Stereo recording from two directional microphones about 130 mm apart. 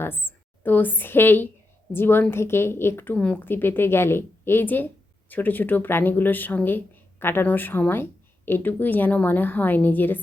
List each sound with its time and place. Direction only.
0.0 s a woman's voice: 15° left (ahead or behind)